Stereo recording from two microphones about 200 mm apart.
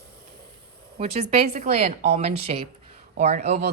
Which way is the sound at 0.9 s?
30° right (ahead or behind).